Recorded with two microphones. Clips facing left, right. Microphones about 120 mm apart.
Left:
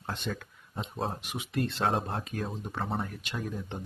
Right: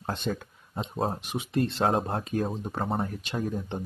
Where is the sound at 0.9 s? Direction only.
30° right (ahead or behind).